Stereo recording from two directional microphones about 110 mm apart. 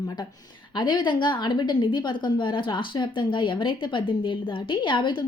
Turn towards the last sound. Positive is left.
turn(degrees=45)  # may be behind; listen again after turning